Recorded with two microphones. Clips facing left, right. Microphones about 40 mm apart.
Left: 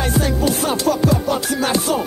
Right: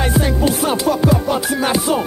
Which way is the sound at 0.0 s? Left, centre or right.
Right.